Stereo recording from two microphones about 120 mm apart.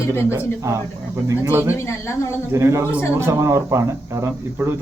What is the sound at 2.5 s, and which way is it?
Speech, 25° right (ahead or behind).